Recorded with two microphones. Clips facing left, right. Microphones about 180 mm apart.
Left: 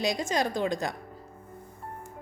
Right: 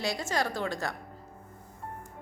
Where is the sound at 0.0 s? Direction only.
15° left (ahead or behind).